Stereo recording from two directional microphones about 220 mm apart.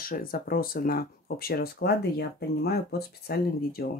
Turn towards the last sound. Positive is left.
turn(degrees=45)  # may be behind; listen again after turning